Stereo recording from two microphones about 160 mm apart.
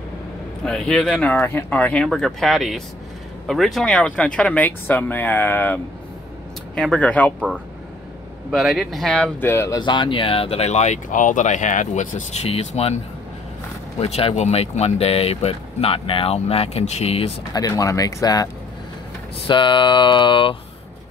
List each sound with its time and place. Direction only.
0.7 s speech: 5° left (ahead or behind)
7.3 s speech: 10° right (ahead or behind); by 9.8 s 15° left (ahead or behind)
9.8 s speech: 30° left (ahead or behind)
17.5 s speech: 20° left (ahead or behind)